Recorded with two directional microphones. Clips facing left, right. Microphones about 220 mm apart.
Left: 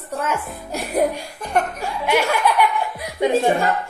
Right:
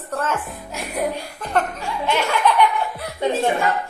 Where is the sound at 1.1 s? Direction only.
15° left (ahead or behind).